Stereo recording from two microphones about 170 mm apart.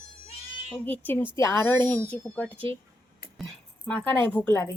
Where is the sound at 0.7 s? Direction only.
10° left (ahead or behind).